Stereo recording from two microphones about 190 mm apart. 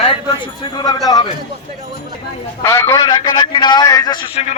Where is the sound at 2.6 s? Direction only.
15° left (ahead or behind).